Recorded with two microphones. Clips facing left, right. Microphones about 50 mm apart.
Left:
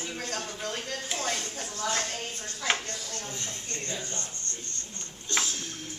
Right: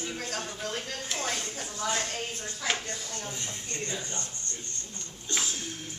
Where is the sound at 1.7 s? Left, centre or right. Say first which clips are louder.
Even; centre.